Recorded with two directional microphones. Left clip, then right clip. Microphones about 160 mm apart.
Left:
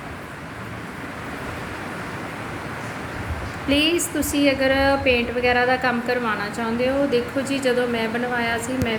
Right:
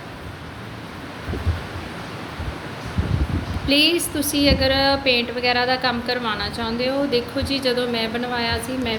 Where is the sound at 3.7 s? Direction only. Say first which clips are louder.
Right 2 dB; 25° left (ahead or behind).